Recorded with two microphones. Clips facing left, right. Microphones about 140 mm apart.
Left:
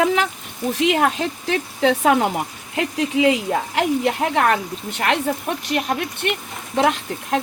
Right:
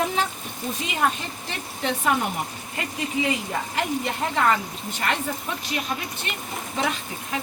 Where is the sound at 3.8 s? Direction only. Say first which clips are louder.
Left 6 dB; 75° left (ahead or behind).